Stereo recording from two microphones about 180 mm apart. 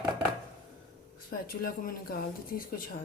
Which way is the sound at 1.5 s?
55° left (ahead or behind).